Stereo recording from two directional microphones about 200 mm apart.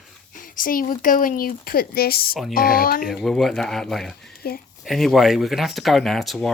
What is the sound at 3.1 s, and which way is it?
Speech, centre (ahead or behind).